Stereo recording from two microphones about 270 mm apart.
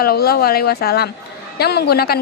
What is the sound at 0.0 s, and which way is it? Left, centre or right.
A woman's voice, left.